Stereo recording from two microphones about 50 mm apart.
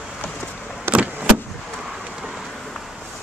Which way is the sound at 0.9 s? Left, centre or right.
Right.